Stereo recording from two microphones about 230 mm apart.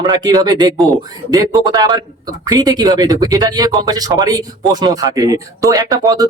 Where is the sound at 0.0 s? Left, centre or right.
Centre.